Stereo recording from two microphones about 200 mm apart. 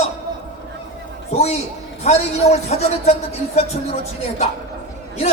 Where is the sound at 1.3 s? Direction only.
30° left (ahead or behind).